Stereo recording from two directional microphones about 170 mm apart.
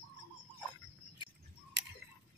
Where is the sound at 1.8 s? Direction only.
90° right.